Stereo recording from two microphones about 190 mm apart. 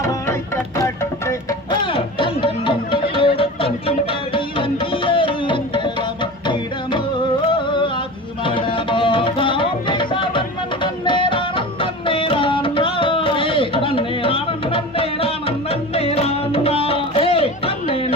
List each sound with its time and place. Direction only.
0.0 s music: 15° left (ahead or behind)
1.9 s music: 25° left (ahead or behind)
7.5 s a sound: 25° left (ahead or behind)
8.4 s music: 25° left (ahead or behind)